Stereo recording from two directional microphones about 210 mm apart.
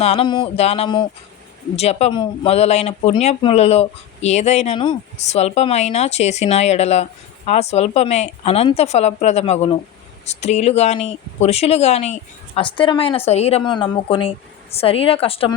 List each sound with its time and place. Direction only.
0.0 s a woman's voice: 30° left (ahead or behind)